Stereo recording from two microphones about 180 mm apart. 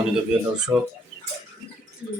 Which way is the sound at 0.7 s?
15° right (ahead or behind).